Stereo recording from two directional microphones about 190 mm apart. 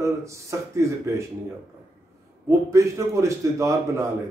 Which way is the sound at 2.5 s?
15° right (ahead or behind).